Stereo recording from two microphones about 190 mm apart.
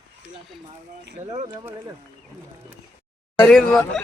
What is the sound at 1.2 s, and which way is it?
Speech, 20° right (ahead or behind).